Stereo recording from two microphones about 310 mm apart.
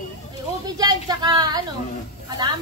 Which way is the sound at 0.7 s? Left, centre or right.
Centre.